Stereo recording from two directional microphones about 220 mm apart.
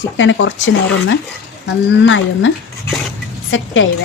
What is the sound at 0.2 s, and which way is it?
Speech, 60° left (ahead or behind).